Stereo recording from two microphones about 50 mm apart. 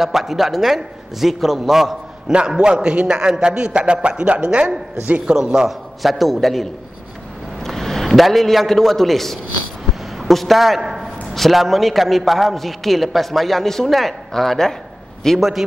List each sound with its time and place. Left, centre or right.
0.0 s a man's voice: centre
2.3 s a man's voice: centre
5.7 s a man's voice: centre
10.8 s a sound: centre
11.3 s a man's voice: centre